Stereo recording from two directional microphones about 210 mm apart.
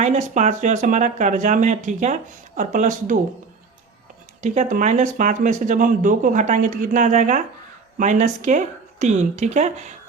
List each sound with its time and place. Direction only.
0.0 s speech: 35° right (ahead or behind)
4.4 s speech: 35° right (ahead or behind)